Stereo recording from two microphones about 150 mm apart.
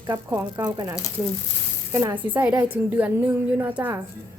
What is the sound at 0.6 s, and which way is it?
Speech, 25° right (ahead or behind).